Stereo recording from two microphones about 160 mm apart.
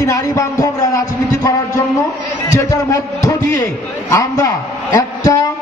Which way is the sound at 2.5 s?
20° left (ahead or behind).